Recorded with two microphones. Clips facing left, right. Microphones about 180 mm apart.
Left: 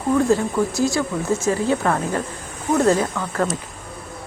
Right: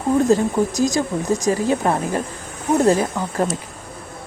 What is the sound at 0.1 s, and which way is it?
Speech, 20° right (ahead or behind).